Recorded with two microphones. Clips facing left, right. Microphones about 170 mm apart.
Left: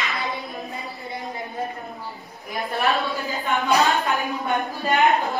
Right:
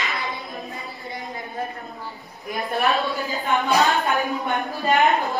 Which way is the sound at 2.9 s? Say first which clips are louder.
Right 1 dB; centre (ahead or behind).